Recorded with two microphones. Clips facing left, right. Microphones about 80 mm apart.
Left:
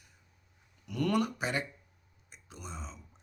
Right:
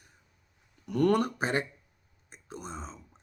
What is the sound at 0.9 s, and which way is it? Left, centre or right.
Speech, right.